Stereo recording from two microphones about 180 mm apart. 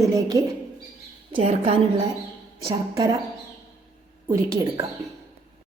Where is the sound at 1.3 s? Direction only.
30° right (ahead or behind).